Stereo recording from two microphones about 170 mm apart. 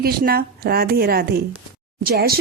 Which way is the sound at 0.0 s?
60° right (ahead or behind).